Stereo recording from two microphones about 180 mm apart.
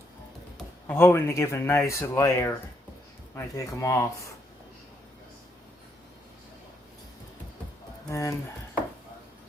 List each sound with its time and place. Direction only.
0.9 s speech: 15° left (ahead or behind)
8.1 s speech: 15° left (ahead or behind)